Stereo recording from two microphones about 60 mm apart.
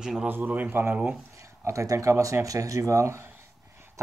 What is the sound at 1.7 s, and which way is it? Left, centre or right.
Speech, right.